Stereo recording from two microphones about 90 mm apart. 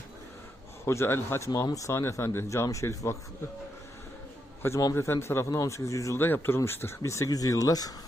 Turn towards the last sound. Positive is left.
turn(degrees=45)  # may be behind; listen again after turning